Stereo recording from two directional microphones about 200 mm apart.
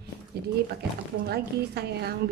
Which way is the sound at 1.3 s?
55° right (ahead or behind).